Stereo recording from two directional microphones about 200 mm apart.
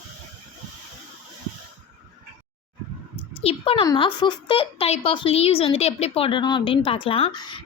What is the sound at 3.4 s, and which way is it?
Speech, 25° left (ahead or behind).